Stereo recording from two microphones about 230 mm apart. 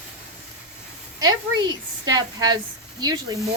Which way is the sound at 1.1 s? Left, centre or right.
Centre.